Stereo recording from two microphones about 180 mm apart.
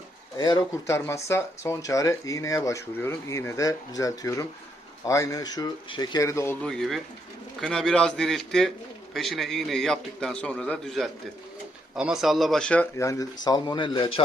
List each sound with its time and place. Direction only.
0.3 s a man's voice: 25° left (ahead or behind)